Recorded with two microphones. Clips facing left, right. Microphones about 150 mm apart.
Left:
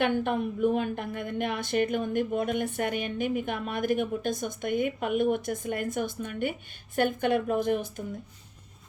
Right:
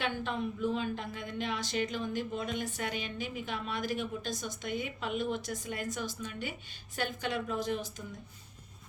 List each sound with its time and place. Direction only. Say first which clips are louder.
0.0 s speech: left 8 dB; 55° left (ahead or behind)